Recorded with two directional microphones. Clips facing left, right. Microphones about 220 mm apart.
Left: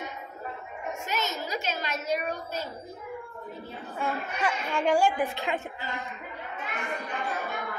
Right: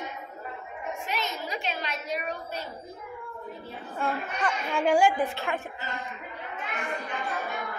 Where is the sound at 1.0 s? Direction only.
40° left (ahead or behind).